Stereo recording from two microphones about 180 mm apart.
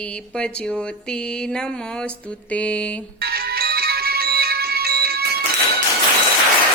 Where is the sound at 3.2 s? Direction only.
60° right (ahead or behind).